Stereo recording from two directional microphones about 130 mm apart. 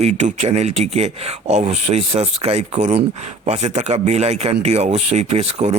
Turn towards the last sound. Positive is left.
turn(degrees=-55)  # may be behind; listen again after turning